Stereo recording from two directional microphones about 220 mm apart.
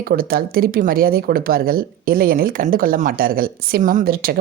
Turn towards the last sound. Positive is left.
turn(degrees=-45)  # may be behind; listen again after turning